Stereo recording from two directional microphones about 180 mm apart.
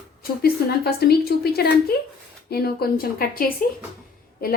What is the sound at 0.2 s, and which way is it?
A woman's voice, 60° left (ahead or behind).